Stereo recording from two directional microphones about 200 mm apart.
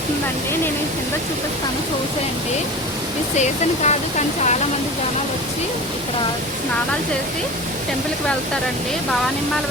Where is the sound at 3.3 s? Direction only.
35° left (ahead or behind).